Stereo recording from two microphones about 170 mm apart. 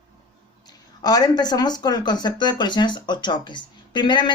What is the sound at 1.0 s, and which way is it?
Speech, 25° left (ahead or behind).